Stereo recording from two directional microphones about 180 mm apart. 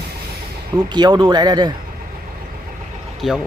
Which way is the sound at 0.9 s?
25° right (ahead or behind).